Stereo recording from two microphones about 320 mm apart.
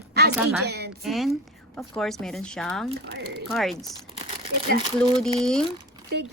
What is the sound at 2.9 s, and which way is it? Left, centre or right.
Speech, right.